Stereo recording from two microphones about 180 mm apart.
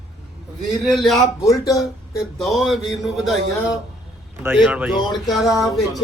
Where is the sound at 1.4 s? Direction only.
20° left (ahead or behind).